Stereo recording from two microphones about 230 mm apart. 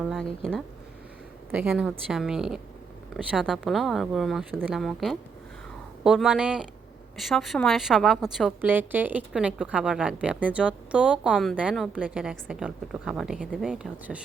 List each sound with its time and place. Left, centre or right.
0.0 s a woman's voice: centre
1.5 s a woman's voice: centre